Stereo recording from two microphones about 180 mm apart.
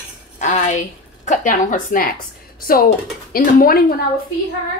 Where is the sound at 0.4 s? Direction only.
40° left (ahead or behind).